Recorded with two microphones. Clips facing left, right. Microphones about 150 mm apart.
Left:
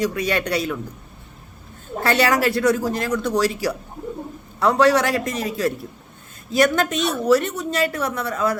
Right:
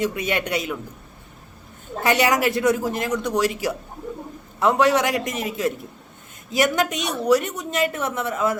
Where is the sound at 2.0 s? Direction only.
15° right (ahead or behind).